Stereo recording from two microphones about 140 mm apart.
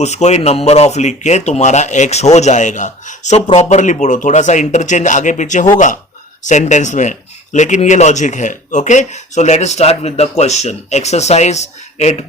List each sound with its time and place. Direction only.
0.0 s speech: 55° left (ahead or behind)